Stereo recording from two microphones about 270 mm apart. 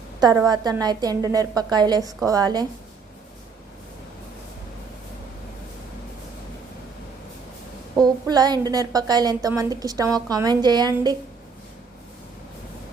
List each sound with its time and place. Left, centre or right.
0.2 s a woman's voice: centre
7.9 s a woman's voice: centre